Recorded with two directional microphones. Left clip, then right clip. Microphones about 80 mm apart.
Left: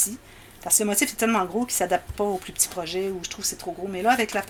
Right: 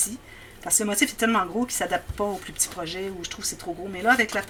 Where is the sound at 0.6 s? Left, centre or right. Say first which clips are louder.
Even; left.